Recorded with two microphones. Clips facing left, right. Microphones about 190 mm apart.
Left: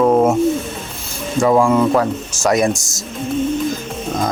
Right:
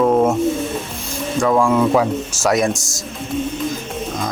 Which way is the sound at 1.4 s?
5° left (ahead or behind).